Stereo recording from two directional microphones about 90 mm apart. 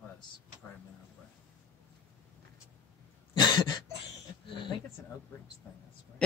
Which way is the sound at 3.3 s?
55° left (ahead or behind).